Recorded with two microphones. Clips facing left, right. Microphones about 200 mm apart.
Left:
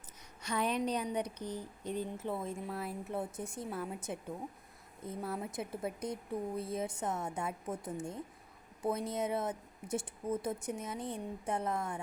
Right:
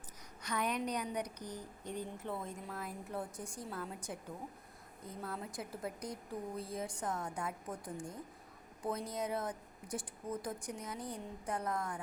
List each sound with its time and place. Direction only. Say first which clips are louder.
0.4 s speech: left 3 dB; 25° left (ahead or behind)